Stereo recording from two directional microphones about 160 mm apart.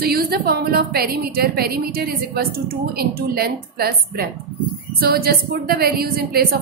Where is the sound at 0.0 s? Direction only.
70° right (ahead or behind).